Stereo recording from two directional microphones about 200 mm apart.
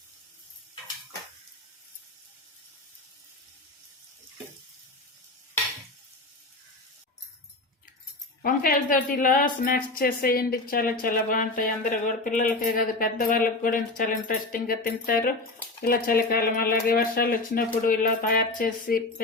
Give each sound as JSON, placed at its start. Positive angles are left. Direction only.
{"t": 8.4, "sound": "a woman's voice", "side_deg": 45}